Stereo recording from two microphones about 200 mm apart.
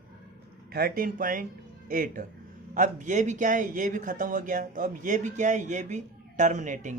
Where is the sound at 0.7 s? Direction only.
50° right (ahead or behind).